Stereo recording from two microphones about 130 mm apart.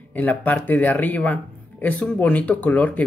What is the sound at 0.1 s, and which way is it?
Speech, 15° left (ahead or behind).